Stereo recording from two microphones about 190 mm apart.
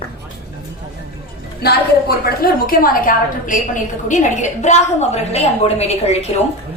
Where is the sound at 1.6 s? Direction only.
55° left (ahead or behind); by 6.3 s 35° left (ahead or behind).